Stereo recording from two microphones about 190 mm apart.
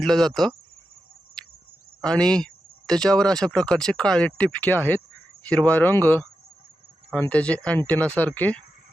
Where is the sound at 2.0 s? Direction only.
5° left (ahead or behind).